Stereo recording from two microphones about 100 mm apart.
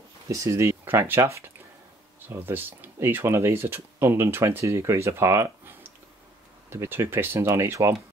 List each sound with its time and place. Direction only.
0.3 s speech: 35° right (ahead or behind)